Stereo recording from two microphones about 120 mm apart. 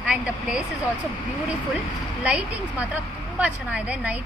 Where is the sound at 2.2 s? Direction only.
10° right (ahead or behind).